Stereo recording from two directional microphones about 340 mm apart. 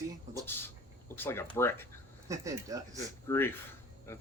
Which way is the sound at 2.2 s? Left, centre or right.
Centre.